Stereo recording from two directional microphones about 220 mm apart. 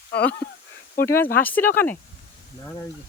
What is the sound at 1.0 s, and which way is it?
Speech, 10° left (ahead or behind).